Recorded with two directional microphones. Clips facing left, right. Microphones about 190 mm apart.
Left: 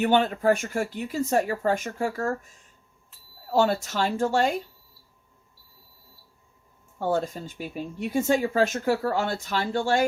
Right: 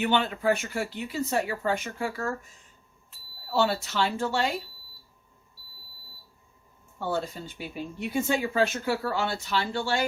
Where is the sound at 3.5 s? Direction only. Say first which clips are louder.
Left 3 dB; 45° left (ahead or behind).